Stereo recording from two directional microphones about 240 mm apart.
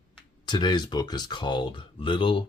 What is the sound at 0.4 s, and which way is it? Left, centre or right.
Speech, centre.